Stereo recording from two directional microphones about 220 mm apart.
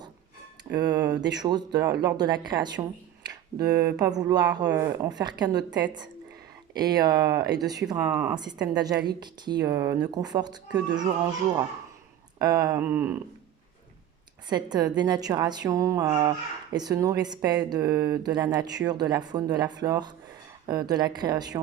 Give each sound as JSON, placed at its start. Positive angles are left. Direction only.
{"t": 0.8, "sound": "a woman's voice", "side_deg": -15}
{"t": 3.6, "sound": "speech", "side_deg": -45}
{"t": 3.8, "sound": "speech", "side_deg": -15}
{"t": 8.7, "sound": "speech", "side_deg": -15}
{"t": 14.5, "sound": "speech", "side_deg": -20}